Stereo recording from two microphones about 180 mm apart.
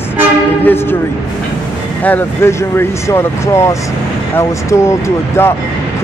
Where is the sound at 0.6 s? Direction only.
10° left (ahead or behind).